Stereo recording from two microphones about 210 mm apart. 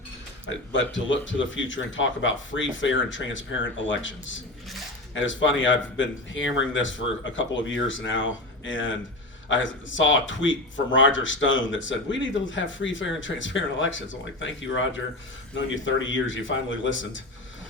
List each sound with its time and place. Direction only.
0.7 s speech: 60° left (ahead or behind)